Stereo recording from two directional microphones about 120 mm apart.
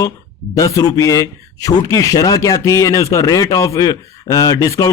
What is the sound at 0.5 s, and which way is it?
Speech, 30° left (ahead or behind).